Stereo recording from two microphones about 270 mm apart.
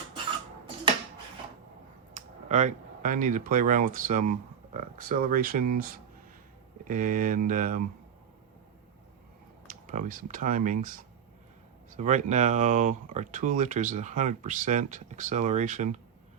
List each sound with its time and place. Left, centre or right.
2.1 s speech: right
9.6 s speech: right